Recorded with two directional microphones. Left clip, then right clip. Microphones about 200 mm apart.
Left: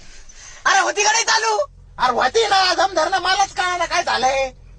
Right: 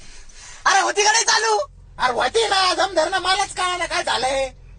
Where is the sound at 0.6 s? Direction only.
10° left (ahead or behind).